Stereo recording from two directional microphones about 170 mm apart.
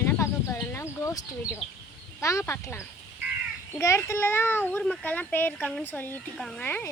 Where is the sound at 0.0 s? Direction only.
15° left (ahead or behind).